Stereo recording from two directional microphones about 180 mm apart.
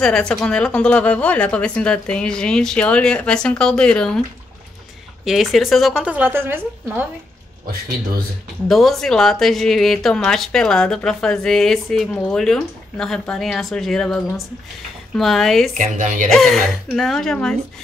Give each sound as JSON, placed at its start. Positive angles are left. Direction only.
{"t": 0.0, "sound": "a woman's voice", "side_deg": 5}
{"t": 5.2, "sound": "a woman's voice", "side_deg": 0}
{"t": 8.6, "sound": "a woman's voice", "side_deg": 0}
{"t": 15.7, "sound": "speech", "side_deg": -45}
{"t": 16.3, "sound": "a woman's voice", "side_deg": 0}